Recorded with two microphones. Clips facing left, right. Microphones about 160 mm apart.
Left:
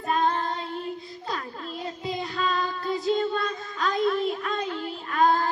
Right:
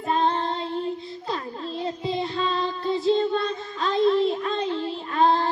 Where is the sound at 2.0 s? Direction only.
25° right (ahead or behind).